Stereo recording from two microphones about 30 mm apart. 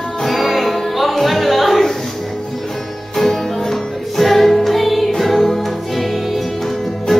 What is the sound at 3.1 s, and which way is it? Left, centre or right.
Music, centre.